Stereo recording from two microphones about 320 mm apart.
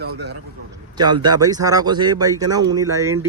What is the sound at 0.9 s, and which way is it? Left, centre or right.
Speech, centre.